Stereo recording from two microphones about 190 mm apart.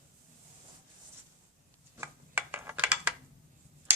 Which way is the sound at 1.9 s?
10° right (ahead or behind).